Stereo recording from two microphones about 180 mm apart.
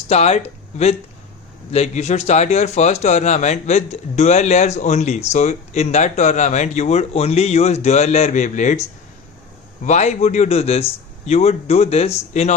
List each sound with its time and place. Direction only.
0.1 s speech: 35° left (ahead or behind)
9.8 s speech: 40° left (ahead or behind)